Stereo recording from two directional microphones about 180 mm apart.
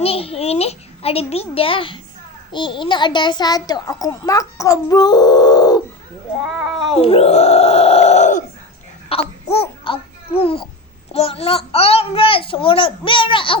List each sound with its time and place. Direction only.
0.0 s a child's voice: 35° left (ahead or behind)
6.4 s cat: centre (ahead or behind)
6.9 s a sound: 35° left (ahead or behind)
9.0 s babbling: 35° left (ahead or behind)
11.1 s a child's voice: 35° left (ahead or behind)